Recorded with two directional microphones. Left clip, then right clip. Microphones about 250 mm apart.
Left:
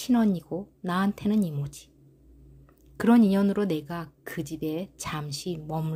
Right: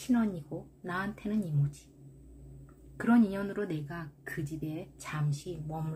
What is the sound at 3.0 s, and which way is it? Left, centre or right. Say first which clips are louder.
Speech: left 6 dB; left.